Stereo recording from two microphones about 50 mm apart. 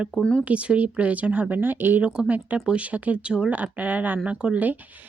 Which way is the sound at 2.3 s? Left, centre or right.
Right.